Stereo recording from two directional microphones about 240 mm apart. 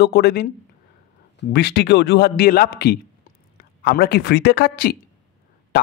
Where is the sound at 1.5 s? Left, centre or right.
Left.